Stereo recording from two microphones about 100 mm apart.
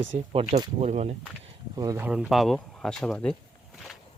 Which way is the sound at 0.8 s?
90° right.